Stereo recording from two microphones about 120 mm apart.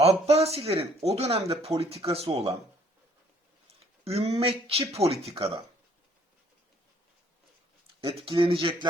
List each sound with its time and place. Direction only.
0.0 s speech: 60° right (ahead or behind)
4.0 s speech: 55° right (ahead or behind)
8.2 s speech: 50° right (ahead or behind)